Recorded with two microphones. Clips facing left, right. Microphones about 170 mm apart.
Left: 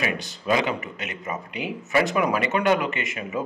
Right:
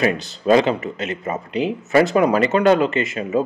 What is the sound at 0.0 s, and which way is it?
Speech, 35° right (ahead or behind).